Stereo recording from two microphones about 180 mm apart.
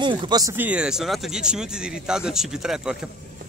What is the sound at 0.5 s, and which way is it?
Speech, 5° right (ahead or behind).